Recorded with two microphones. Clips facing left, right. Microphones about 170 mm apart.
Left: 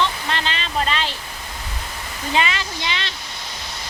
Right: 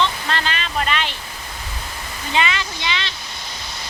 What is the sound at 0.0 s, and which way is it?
Waterfall, 20° left (ahead or behind).